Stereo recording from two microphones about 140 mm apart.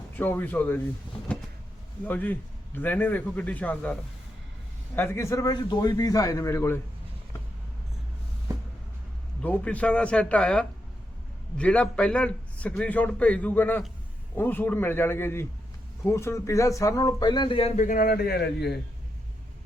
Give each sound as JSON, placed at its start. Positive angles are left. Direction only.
{"t": 0.2, "sound": "a man's voice", "side_deg": 15}
{"t": 2.0, "sound": "a man's voice", "side_deg": 10}
{"t": 4.9, "sound": "a man's voice", "side_deg": 15}
{"t": 9.4, "sound": "a man's voice", "side_deg": 10}
{"t": 17.7, "sound": "a man's voice", "side_deg": 75}